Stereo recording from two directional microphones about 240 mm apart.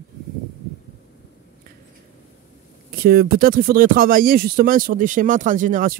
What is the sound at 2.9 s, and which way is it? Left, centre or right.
Speech, right.